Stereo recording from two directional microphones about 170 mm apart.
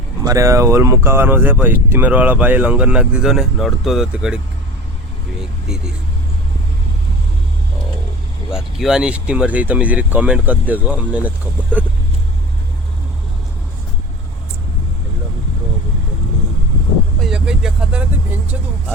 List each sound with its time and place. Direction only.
0.3 s speech: 20° right (ahead or behind)
5.4 s speech: 5° right (ahead or behind)
8.4 s speech: 5° right (ahead or behind)
17.2 s vehicle: centre (ahead or behind)